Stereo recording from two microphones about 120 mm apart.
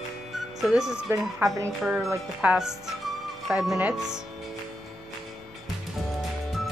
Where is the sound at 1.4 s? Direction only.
20° right (ahead or behind).